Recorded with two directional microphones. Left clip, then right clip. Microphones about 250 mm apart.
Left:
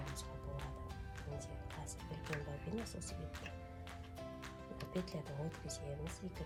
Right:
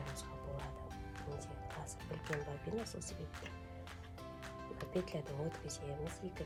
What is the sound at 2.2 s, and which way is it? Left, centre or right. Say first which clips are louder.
Speech: right 3 dB; centre.